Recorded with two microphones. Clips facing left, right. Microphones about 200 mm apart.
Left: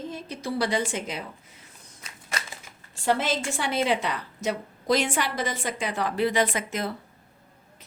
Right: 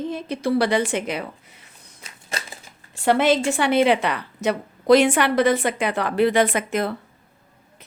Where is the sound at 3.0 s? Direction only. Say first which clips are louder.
Right 7 dB; 65° right (ahead or behind).